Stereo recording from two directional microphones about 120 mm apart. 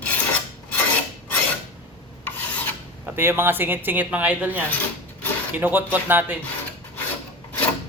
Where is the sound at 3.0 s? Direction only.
20° right (ahead or behind).